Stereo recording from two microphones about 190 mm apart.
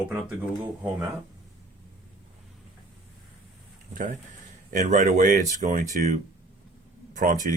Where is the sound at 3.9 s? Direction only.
45° right (ahead or behind).